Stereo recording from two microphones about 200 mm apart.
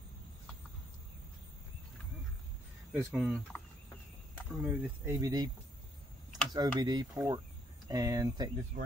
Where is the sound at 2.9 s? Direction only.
5° right (ahead or behind).